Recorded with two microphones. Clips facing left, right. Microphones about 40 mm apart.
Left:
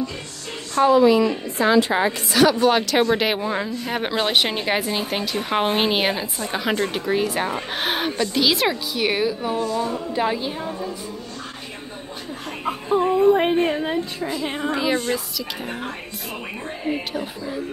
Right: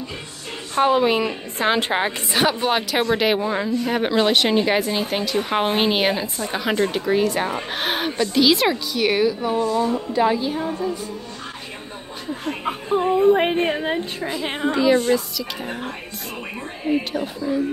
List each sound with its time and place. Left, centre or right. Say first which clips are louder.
0.7 s a woman's voice: left 3 dB; right
2.0 s a woman's voice: left 3 dB; right
2.7 s speech: left 2 dB; centre
3.1 s speech: right 1 dB; centre
10.2 s a woman's voice: right 5 dB; centre
12.9 s speech: even; centre
14.4 s a woman's voice: right 4 dB; right
14.7 s speech: right 6 dB; centre
17.1 s speech: right 3 dB; centre